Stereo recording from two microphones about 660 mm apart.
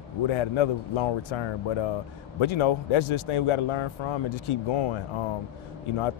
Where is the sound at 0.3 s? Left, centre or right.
Left.